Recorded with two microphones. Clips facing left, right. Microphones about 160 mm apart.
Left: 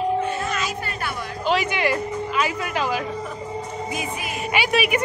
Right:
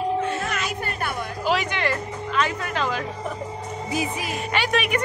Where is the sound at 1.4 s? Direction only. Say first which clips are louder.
Left 2 dB; centre (ahead or behind).